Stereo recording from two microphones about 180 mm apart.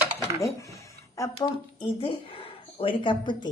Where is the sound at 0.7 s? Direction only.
15° left (ahead or behind).